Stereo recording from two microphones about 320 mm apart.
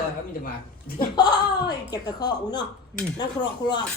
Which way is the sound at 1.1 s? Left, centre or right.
Centre.